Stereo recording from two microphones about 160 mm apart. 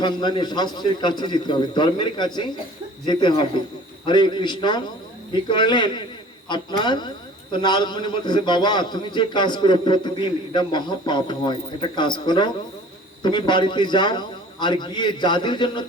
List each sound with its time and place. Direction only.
0.0 s a man's voice: 30° left (ahead or behind)